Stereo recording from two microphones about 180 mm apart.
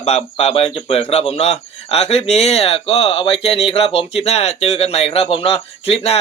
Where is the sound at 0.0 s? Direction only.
35° left (ahead or behind).